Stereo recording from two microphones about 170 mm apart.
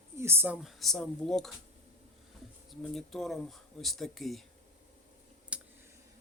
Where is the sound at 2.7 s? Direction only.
Centre (ahead or behind).